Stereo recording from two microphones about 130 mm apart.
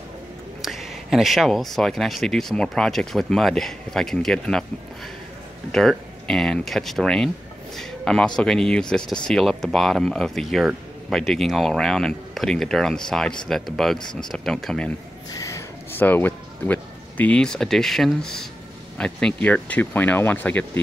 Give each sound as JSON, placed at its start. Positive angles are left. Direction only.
{"t": 0.6, "sound": "speech", "side_deg": 0}
{"t": 5.7, "sound": "speech", "side_deg": 5}
{"t": 15.3, "sound": "snort", "side_deg": 25}
{"t": 16.0, "sound": "speech", "side_deg": 15}